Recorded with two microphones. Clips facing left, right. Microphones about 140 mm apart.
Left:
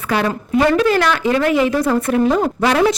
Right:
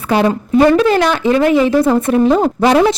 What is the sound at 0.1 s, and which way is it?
A woman's voice, 25° right (ahead or behind).